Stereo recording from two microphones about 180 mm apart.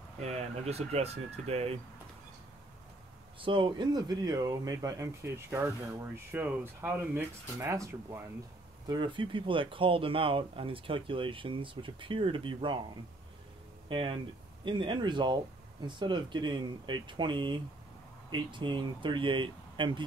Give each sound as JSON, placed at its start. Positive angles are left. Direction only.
{"t": 0.2, "sound": "speech", "side_deg": -35}
{"t": 3.3, "sound": "speech", "side_deg": -30}
{"t": 13.8, "sound": "speech", "side_deg": -30}